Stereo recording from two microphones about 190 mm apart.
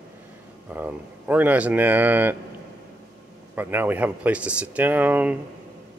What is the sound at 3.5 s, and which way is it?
Speech, 10° right (ahead or behind).